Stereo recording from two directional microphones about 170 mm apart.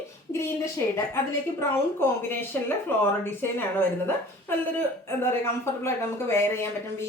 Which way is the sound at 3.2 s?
15° left (ahead or behind).